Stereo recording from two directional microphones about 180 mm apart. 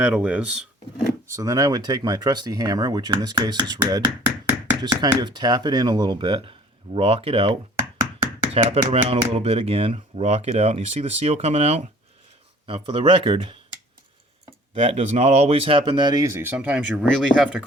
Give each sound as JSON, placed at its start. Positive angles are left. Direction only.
{"t": 0.0, "sound": "speech", "side_deg": -5}
{"t": 1.3, "sound": "speech", "side_deg": -20}
{"t": 14.8, "sound": "speech", "side_deg": -35}